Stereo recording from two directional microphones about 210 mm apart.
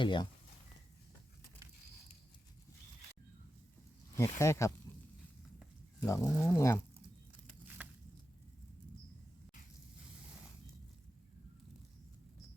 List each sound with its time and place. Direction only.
0.0 s speech: 25° left (ahead or behind)
4.2 s speech: 15° left (ahead or behind)
6.0 s speech: 15° left (ahead or behind)
7.8 s a sound: 5° right (ahead or behind)